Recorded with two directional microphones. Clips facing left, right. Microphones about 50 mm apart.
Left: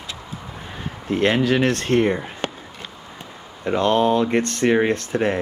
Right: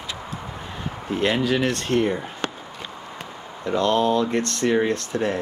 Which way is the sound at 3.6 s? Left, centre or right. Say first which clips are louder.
Left 2 dB; left.